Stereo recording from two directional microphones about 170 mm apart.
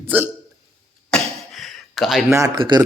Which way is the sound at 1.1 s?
Centre (ahead or behind).